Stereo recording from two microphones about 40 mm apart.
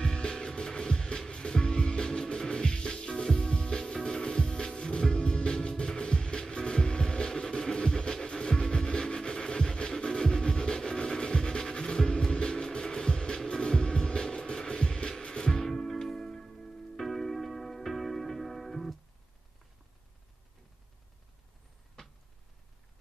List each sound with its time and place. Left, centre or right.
0.0 s music: left
15.6 s music: centre